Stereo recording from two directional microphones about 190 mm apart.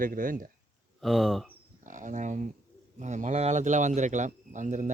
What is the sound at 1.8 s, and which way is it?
Speech, 40° right (ahead or behind).